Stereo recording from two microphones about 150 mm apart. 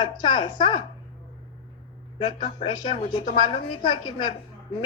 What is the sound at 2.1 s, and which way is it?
A man's voice, 35° left (ahead or behind).